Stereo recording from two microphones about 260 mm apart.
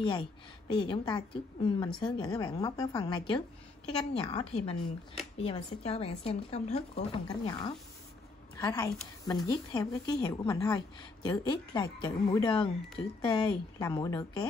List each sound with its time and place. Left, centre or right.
0.7 s a woman's voice: centre